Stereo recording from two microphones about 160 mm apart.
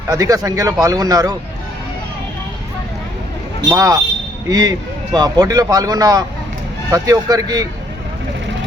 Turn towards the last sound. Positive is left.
turn(degrees=-25)  # may be behind; listen again after turning